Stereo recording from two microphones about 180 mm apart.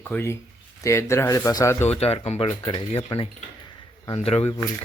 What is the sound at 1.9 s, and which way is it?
Speech, 35° left (ahead or behind).